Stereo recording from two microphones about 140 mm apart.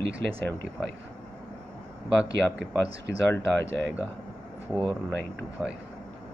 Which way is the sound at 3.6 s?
20° left (ahead or behind).